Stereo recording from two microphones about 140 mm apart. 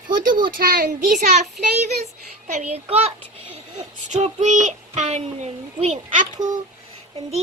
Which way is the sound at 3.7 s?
55° right (ahead or behind).